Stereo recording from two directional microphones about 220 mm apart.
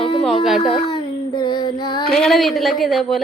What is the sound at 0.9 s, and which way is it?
Child singing, 20° left (ahead or behind).